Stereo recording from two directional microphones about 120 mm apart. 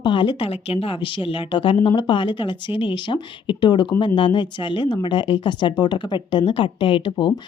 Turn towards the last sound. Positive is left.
turn(degrees=45)  # may be behind; listen again after turning